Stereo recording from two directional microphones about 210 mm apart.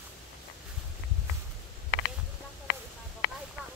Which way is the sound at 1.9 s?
65° left (ahead or behind).